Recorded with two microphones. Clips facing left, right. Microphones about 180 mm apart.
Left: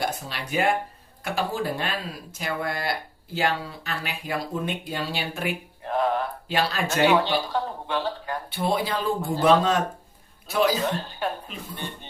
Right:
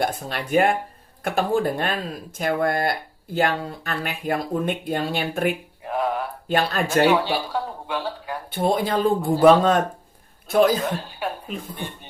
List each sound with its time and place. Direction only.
0.0 s speech: 55° right (ahead or behind)
5.8 s a sound: 10° right (ahead or behind)
6.5 s speech: 50° right (ahead or behind)
7.1 s speech: 10° right (ahead or behind)
8.4 s speech: 50° right (ahead or behind)
10.9 s speech: 10° right (ahead or behind)
11.5 s speech: 50° right (ahead or behind)